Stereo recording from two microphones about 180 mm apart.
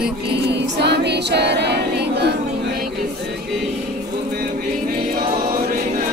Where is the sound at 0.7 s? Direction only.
70° right (ahead or behind).